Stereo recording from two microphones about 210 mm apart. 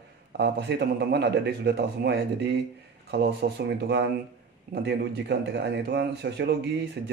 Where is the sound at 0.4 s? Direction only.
55° right (ahead or behind).